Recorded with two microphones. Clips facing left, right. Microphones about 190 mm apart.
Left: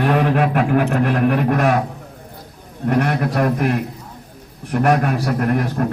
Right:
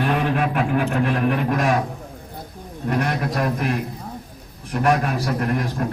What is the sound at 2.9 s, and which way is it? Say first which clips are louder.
Speech: left 4 dB; 60° left (ahead or behind).